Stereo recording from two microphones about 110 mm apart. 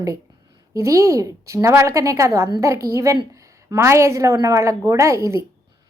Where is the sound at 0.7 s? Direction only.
30° right (ahead or behind).